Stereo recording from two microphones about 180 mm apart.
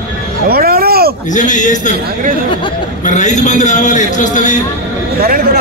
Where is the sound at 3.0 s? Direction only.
40° left (ahead or behind).